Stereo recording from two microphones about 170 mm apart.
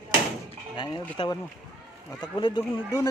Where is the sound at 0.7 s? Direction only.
30° left (ahead or behind).